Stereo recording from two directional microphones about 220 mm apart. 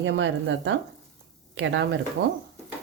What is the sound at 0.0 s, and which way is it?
Speech, 60° right (ahead or behind).